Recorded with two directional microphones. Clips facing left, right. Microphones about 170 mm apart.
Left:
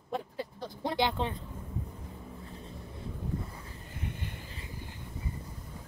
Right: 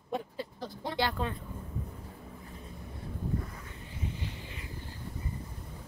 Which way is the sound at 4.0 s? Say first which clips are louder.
Right 1 dB; 55° left (ahead or behind).